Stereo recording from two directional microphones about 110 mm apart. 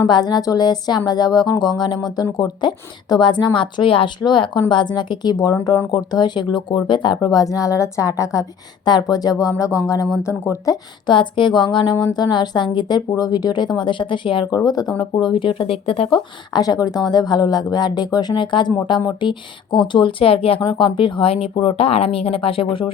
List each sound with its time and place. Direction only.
0.0 s a woman's voice: 40° left (ahead or behind)
8.8 s a woman's voice: 40° left (ahead or behind)
11.1 s a woman's voice: 45° left (ahead or behind)
16.1 s a woman's voice: 40° left (ahead or behind); by 22.9 s 55° left (ahead or behind)